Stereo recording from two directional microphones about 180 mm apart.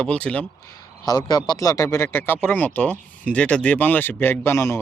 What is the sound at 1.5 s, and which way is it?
Speech, 20° left (ahead or behind).